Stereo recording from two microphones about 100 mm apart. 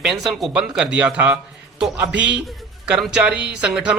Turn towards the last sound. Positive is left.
turn(degrees=-10)  # may be behind; listen again after turning